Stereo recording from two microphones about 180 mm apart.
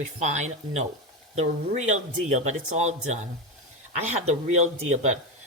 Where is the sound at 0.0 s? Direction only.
40° right (ahead or behind).